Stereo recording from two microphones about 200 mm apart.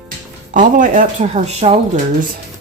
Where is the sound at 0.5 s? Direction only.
40° right (ahead or behind).